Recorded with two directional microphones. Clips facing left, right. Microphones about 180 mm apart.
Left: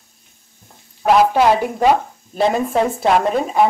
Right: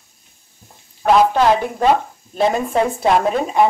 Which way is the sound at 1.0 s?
10° left (ahead or behind).